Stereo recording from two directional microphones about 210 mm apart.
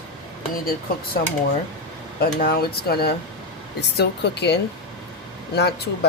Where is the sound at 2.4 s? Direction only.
45° left (ahead or behind).